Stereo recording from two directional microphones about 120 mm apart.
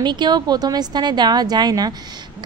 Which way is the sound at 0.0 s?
35° right (ahead or behind).